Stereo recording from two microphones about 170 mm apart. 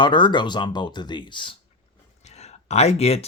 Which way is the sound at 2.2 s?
40° left (ahead or behind).